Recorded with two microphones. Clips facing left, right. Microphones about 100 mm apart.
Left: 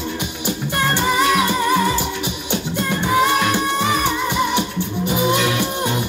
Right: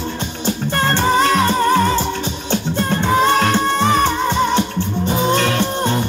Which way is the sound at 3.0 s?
30° right (ahead or behind).